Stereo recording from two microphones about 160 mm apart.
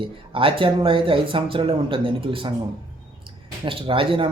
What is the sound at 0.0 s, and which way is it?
Speech, 35° right (ahead or behind).